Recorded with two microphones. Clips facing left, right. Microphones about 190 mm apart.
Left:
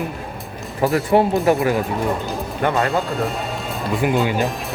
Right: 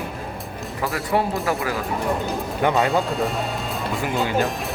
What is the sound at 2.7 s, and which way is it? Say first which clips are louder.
Speech: even; centre (ahead or behind).